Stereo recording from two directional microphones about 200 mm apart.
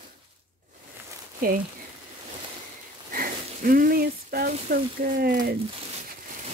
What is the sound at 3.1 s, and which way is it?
Speech, 45° right (ahead or behind).